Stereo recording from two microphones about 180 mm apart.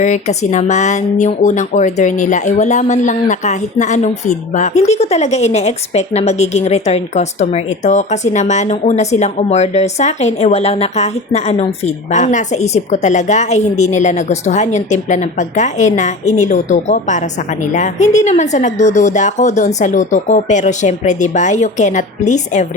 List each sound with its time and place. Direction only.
0.0 s speech: 40° left (ahead or behind)